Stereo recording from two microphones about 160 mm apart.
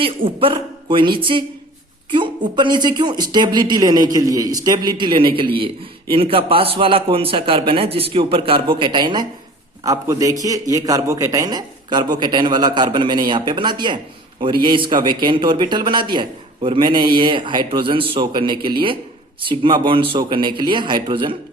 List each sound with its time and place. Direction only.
0.0 s a man's voice: 35° right (ahead or behind)